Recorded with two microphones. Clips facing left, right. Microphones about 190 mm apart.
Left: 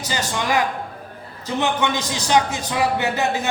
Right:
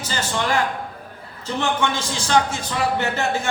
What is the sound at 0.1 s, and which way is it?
A man's voice, 15° left (ahead or behind).